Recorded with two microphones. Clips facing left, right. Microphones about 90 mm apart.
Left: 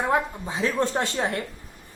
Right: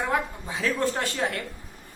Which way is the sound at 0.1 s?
20° left (ahead or behind).